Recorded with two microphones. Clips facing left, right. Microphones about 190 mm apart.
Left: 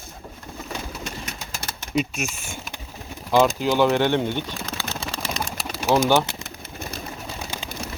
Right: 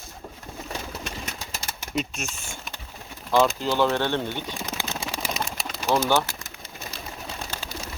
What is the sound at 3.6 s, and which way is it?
Speech, 10° left (ahead or behind).